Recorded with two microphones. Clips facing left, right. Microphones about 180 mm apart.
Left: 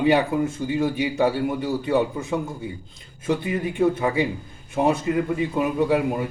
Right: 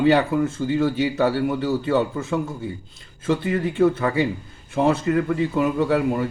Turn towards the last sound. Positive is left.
turn(degrees=20)  # may be behind; listen again after turning